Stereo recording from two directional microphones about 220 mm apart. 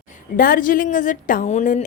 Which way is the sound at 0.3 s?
40° left (ahead or behind).